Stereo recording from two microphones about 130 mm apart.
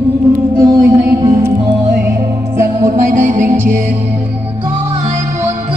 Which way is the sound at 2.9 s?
75° right (ahead or behind).